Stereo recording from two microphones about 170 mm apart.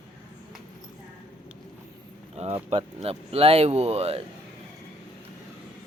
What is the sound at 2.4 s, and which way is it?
Speech, 40° right (ahead or behind).